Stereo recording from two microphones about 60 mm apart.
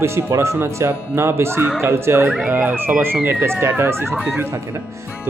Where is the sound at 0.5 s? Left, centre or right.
Right.